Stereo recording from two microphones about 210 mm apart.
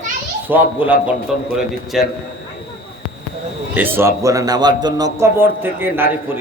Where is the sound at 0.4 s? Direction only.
10° right (ahead or behind).